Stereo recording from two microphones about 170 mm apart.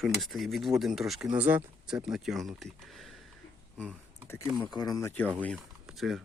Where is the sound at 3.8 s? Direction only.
15° left (ahead or behind).